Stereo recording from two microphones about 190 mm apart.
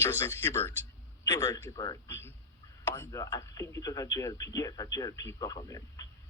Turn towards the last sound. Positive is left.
turn(degrees=20)  # may be behind; listen again after turning